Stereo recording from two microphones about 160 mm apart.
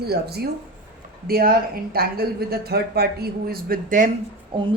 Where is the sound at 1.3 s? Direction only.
70° right (ahead or behind).